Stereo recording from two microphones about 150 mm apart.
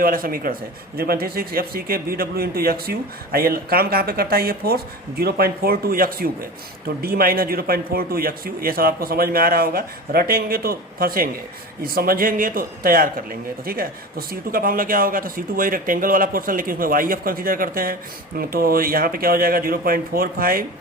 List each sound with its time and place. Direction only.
0.0 s speech: 70° right (ahead or behind)
0.9 s a man's voice: 90° right